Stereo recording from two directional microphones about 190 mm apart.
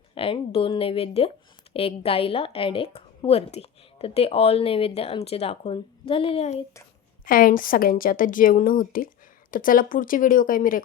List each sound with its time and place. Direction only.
0.1 s a woman's voice: 30° left (ahead or behind)
7.3 s a woman's voice: 45° left (ahead or behind)